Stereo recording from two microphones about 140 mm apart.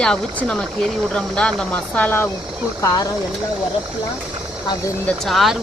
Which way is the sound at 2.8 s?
25° left (ahead or behind).